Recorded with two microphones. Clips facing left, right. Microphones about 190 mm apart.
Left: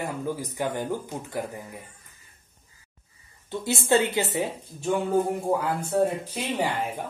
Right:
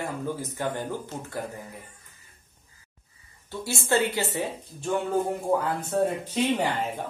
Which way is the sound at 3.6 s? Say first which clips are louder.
Left 2 dB; 20° left (ahead or behind).